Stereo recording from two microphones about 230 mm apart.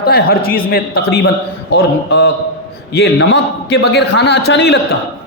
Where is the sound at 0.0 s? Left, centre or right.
Left.